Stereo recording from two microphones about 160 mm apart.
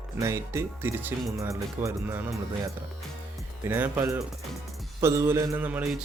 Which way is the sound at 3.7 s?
15° right (ahead or behind).